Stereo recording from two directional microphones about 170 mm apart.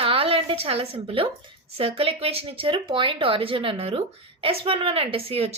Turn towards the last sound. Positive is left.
turn(degrees=-35)  # may be behind; listen again after turning